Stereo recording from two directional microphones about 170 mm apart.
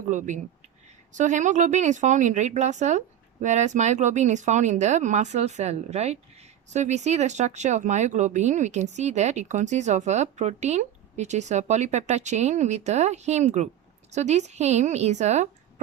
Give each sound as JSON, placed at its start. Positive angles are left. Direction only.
{"t": 0.1, "sound": "speech", "side_deg": -45}